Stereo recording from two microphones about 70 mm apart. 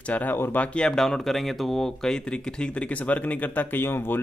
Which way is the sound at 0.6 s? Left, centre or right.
Centre.